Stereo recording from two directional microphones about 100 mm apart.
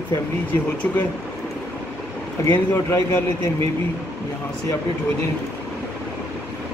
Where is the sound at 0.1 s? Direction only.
20° left (ahead or behind).